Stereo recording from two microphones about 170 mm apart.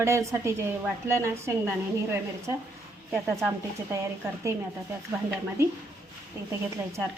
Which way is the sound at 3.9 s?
15° right (ahead or behind).